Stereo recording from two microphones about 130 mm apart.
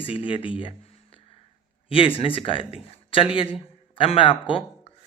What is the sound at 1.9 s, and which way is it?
A man's voice, 45° left (ahead or behind).